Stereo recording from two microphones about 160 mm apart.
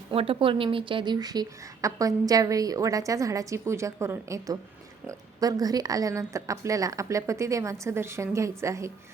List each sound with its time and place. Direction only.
0.1 s a woman's voice: 35° right (ahead or behind); by 8.9 s 20° right (ahead or behind)